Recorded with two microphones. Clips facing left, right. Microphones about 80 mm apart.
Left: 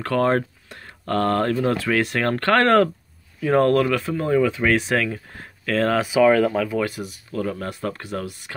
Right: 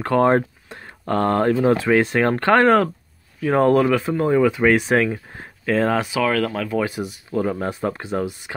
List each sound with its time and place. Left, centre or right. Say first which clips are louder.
0.0 s speech: right 3 dB; right
3.3 s speech: right 1 dB; centre
6.1 s speech: left 4 dB; centre
6.8 s speech: right 2 dB; centre